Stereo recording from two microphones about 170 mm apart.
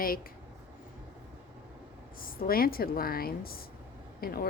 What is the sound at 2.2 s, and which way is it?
A woman's voice, 60° left (ahead or behind).